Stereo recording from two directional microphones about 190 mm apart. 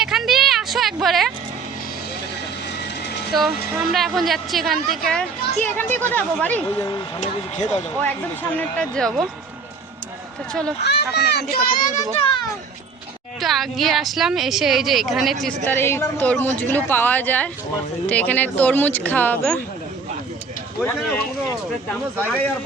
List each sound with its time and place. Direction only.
0.0 s a sound: centre (ahead or behind)
3.3 s a woman's voice: centre (ahead or behind)
7.2 s speech: 35° left (ahead or behind)
8.5 s a woman's voice: 5° left (ahead or behind)
10.8 s speech: 60° left (ahead or behind)
11.5 s speech: 40° left (ahead or behind)
13.4 s a woman's voice: centre (ahead or behind)
15.6 s speech: 10° left (ahead or behind)
20.8 s speech: 10° left (ahead or behind)